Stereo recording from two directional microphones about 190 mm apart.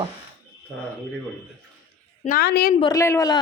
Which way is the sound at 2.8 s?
15° left (ahead or behind).